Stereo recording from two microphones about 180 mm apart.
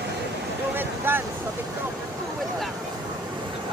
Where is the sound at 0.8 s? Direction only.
10° right (ahead or behind).